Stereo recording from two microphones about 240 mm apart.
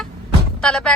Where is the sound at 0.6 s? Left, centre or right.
Centre.